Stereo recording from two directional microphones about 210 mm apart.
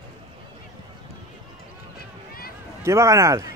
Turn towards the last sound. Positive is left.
turn(degrees=-15)  # may be behind; listen again after turning